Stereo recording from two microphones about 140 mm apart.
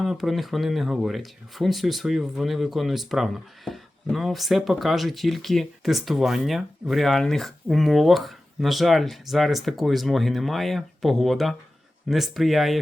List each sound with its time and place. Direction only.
0.0 s speech: centre (ahead or behind)